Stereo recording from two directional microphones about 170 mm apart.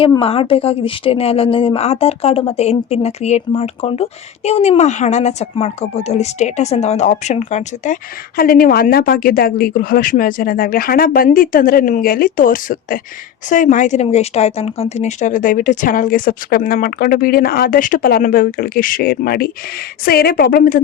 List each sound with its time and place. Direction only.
0.2 s a woman's voice: 35° left (ahead or behind)
8.4 s speech: 60° left (ahead or behind)